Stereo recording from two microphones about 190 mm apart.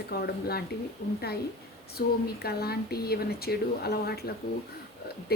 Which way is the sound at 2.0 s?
55° left (ahead or behind).